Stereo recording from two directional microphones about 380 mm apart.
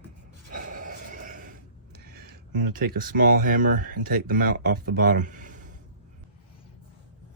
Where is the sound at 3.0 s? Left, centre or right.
Right.